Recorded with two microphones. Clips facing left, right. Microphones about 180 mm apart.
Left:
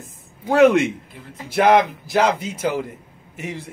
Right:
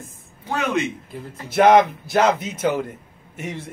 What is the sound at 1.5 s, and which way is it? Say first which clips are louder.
A man's voice: right 2 dB; centre (ahead or behind).